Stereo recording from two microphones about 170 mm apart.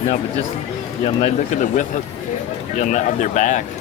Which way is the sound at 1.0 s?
40° left (ahead or behind).